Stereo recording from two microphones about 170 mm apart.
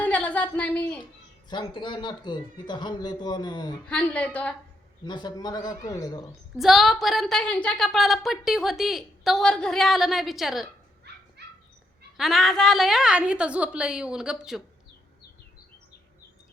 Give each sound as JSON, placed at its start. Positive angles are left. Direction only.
{"t": 0.0, "sound": "a sound", "side_deg": 10}
{"t": 1.5, "sound": "a man's voice", "side_deg": 25}
{"t": 3.8, "sound": "a woman's voice", "side_deg": 5}
{"t": 5.0, "sound": "a man's voice", "side_deg": 25}
{"t": 6.6, "sound": "a woman's voice", "side_deg": 0}
{"t": 11.1, "sound": "dog", "side_deg": -75}
{"t": 12.1, "sound": "a woman's voice", "side_deg": 0}